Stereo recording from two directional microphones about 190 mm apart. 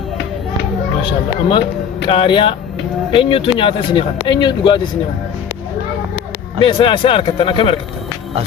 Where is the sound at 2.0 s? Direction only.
25° left (ahead or behind).